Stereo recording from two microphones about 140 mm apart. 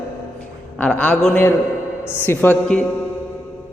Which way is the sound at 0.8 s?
10° left (ahead or behind).